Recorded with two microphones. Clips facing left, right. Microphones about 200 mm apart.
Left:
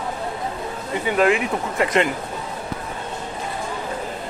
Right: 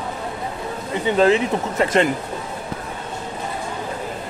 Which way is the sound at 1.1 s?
30° right (ahead or behind).